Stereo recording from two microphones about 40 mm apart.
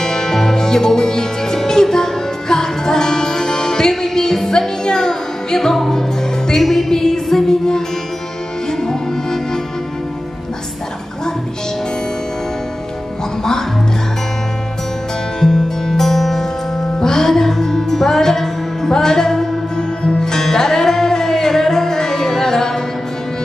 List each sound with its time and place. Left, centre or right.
0.0 s music: centre
13.4 s music: centre
15.4 s music: centre